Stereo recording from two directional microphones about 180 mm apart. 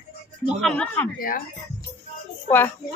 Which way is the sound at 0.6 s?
5° left (ahead or behind).